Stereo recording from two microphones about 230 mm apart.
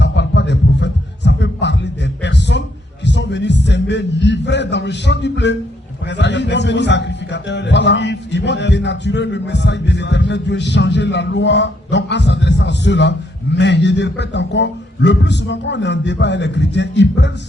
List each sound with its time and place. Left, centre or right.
0.0 s music: left
6.1 s a man's voice: left